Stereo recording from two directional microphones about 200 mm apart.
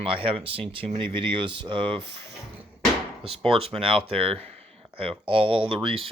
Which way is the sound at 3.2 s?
30° right (ahead or behind).